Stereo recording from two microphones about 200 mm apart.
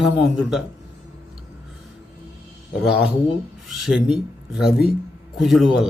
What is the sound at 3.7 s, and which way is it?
Speech, centre (ahead or behind).